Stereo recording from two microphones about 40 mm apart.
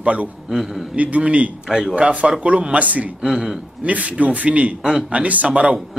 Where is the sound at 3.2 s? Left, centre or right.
Centre.